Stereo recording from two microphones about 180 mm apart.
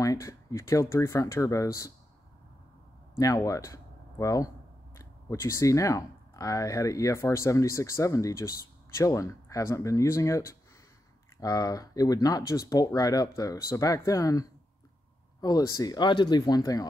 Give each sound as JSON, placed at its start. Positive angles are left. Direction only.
{"t": 0.0, "sound": "speech", "side_deg": 20}
{"t": 3.2, "sound": "speech", "side_deg": 20}